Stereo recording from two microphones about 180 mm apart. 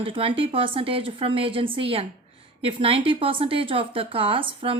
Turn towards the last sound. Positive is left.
turn(degrees=-30)  # may be behind; listen again after turning